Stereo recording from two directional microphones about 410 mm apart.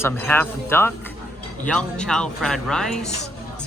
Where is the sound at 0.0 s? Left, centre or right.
Centre.